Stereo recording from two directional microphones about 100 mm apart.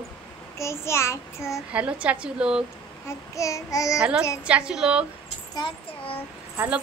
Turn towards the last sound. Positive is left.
turn(degrees=-20)  # may be behind; listen again after turning